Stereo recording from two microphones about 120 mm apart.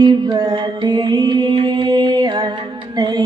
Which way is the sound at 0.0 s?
35° right (ahead or behind).